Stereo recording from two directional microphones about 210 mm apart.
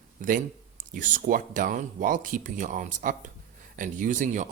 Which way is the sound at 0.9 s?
40° right (ahead or behind).